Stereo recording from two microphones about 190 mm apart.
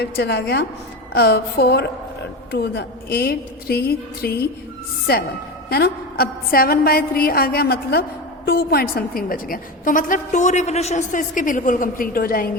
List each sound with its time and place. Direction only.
0.0 s a woman's voice: 60° left (ahead or behind)
5.6 s a woman's voice: 55° left (ahead or behind)